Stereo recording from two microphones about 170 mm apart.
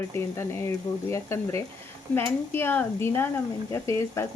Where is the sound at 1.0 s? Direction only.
15° left (ahead or behind).